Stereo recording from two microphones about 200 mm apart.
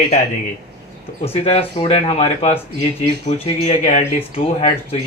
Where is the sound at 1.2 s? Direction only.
30° left (ahead or behind).